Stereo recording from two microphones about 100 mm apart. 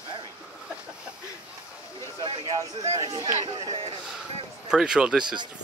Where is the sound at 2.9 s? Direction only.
40° right (ahead or behind).